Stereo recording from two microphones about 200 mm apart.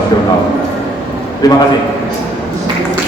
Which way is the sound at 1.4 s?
15° left (ahead or behind).